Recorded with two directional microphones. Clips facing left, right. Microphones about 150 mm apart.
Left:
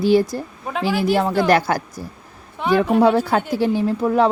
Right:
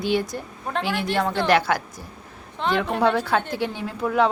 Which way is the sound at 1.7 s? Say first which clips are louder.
Left 2 dB; 40° left (ahead or behind).